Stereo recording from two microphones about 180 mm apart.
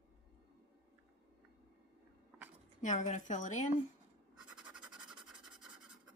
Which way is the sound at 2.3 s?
10° right (ahead or behind).